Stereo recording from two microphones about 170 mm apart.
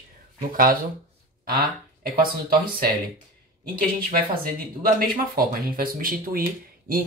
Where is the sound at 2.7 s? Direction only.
60° right (ahead or behind).